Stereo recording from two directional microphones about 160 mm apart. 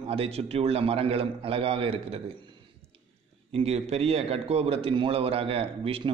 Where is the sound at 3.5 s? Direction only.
40° right (ahead or behind).